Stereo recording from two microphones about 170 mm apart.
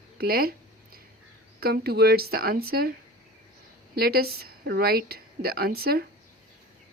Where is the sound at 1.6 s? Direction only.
70° right (ahead or behind).